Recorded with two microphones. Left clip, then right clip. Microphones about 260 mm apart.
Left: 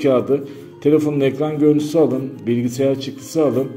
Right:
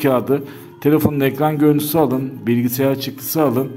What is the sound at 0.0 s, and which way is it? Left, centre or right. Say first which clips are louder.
Speech: left 1 dB; right.